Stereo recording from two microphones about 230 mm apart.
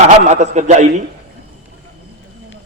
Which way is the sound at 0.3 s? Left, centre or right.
Right.